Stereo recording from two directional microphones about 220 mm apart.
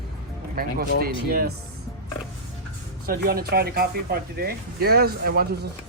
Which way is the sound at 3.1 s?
45° right (ahead or behind).